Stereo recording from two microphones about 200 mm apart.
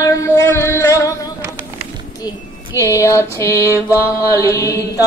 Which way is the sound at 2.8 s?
15° left (ahead or behind).